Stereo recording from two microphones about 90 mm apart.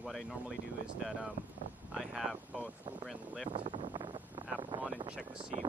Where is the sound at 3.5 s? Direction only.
65° right (ahead or behind).